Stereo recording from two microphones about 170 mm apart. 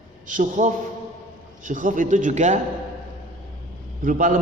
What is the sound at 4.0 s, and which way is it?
Speech, 50° right (ahead or behind).